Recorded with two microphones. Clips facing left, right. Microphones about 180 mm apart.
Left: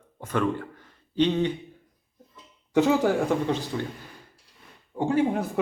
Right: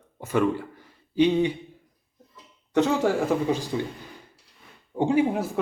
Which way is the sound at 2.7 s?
5° left (ahead or behind).